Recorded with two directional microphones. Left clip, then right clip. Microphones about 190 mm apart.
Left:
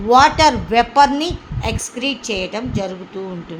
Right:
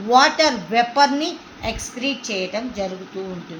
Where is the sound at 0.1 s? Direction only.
60° left (ahead or behind).